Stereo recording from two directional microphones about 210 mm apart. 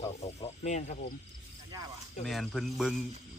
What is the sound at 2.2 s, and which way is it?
Speech, centre (ahead or behind).